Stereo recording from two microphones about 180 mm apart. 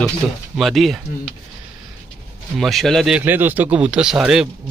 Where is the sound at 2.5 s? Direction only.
Centre (ahead or behind).